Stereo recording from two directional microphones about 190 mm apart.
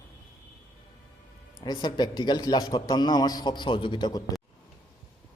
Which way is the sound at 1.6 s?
20° left (ahead or behind).